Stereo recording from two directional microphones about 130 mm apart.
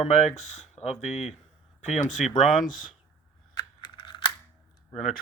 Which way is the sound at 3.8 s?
35° left (ahead or behind).